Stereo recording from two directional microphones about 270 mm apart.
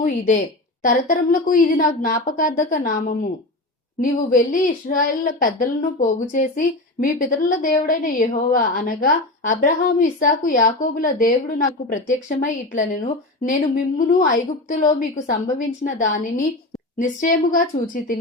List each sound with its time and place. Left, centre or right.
0.8 s a woman's voice: left